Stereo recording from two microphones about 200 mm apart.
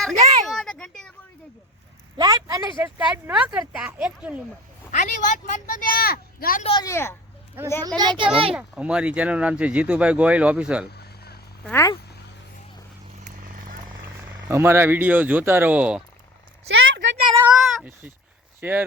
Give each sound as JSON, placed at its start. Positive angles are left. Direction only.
{"t": 0.4, "sound": "a sound", "side_deg": 0}
{"t": 2.1, "sound": "speech", "side_deg": -20}
{"t": 3.0, "sound": "speech", "side_deg": -5}
{"t": 4.9, "sound": "speech", "side_deg": 40}
{"t": 6.6, "sound": "speech", "side_deg": 30}
{"t": 6.8, "sound": "speech", "side_deg": 10}
{"t": 7.6, "sound": "speech", "side_deg": -10}
{"t": 7.9, "sound": "a child's voice", "side_deg": -25}
{"t": 8.5, "sound": "speech", "side_deg": -5}
{"t": 10.9, "sound": "a sound", "side_deg": 55}
{"t": 11.6, "sound": "speech", "side_deg": 15}
{"t": 14.4, "sound": "speech", "side_deg": -15}
{"t": 16.6, "sound": "a sound", "side_deg": -65}
{"t": 17.4, "sound": "speech", "side_deg": 0}